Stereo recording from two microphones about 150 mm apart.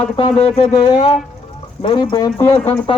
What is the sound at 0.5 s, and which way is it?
A man's voice, 35° left (ahead or behind).